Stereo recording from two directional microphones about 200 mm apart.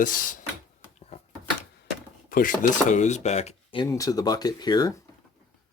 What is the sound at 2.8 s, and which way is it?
Speech, 40° left (ahead or behind).